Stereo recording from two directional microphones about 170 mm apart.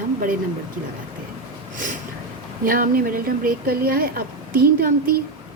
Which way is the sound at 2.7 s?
55° right (ahead or behind).